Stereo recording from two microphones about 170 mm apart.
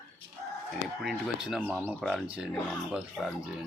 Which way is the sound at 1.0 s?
Centre (ahead or behind).